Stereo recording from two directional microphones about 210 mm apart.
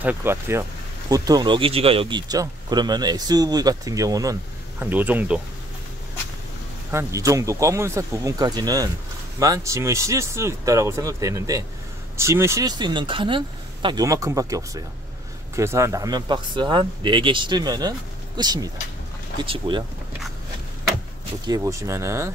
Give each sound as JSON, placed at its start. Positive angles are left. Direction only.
{"t": 0.0, "sound": "speech", "side_deg": -10}
{"t": 6.9, "sound": "speech", "side_deg": -15}
{"t": 21.5, "sound": "speech", "side_deg": -15}